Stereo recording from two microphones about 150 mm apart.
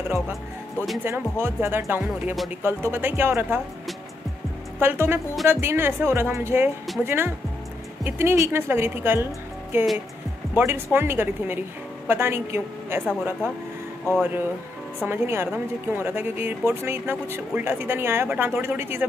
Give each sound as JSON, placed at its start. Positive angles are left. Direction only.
{"t": 1.0, "sound": "speech", "side_deg": -15}
{"t": 4.7, "sound": "speech", "side_deg": -15}